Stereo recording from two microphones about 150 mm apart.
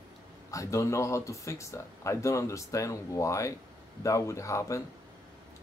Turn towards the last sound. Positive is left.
turn(degrees=20)  # may be behind; listen again after turning